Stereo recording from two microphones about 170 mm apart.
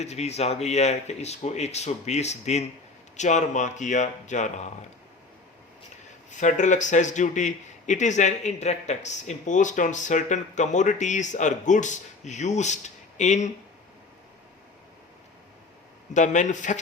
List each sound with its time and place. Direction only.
0.0 s speech: 40° left (ahead or behind)
6.3 s speech: 45° left (ahead or behind)
16.1 s speech: 45° left (ahead or behind)